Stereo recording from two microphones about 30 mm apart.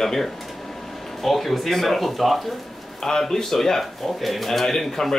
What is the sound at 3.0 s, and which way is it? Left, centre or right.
Speech, centre.